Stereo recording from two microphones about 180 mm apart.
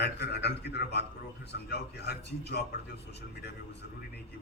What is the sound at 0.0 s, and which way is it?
A man's voice, 65° left (ahead or behind).